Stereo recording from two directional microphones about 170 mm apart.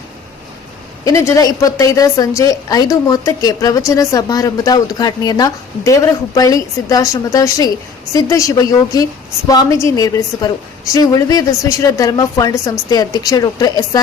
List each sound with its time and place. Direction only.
1.0 s a woman's voice: 20° left (ahead or behind)